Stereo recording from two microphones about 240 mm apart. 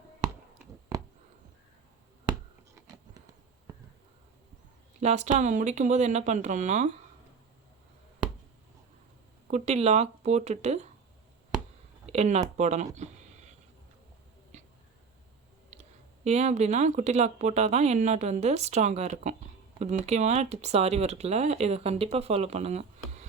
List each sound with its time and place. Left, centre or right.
0.9 s a sound: centre
4.9 s speech: right
9.5 s speech: right
12.0 s speech: right
14.5 s a sound: right
15.7 s speech: right